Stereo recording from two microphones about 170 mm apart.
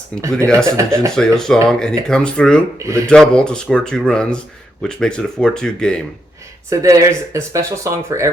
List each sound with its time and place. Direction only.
0.2 s speech: 15° right (ahead or behind)
1.1 s speech: 5° left (ahead or behind)
2.7 s speech: 15° right (ahead or behind)
3.1 s speech: 5° left (ahead or behind)
6.7 s speech: 15° right (ahead or behind)